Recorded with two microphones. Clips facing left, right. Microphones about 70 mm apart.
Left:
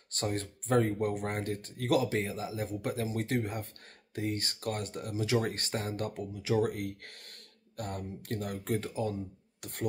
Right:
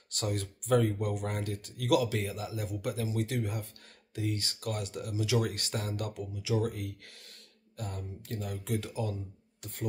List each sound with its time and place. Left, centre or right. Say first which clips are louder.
0.1 s speech: left 1 dB; left
9.6 s speech: left 2 dB; left